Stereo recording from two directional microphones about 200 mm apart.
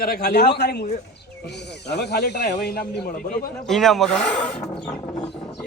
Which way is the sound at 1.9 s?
55° left (ahead or behind).